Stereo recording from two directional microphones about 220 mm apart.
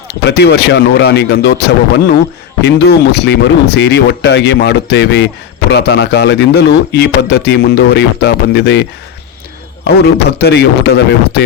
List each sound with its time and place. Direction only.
0.3 s speech: 50° left (ahead or behind)